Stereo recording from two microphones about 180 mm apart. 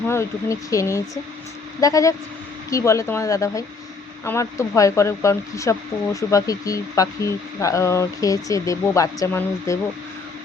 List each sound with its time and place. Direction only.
0.1 s speech: 15° left (ahead or behind)